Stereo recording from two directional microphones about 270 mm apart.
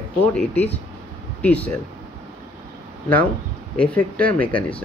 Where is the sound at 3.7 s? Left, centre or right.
Centre.